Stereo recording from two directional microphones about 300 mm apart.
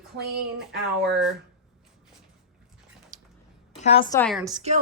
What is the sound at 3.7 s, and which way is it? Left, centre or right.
Speech, centre.